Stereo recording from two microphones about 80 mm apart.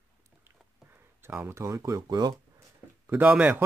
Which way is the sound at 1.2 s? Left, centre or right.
Right.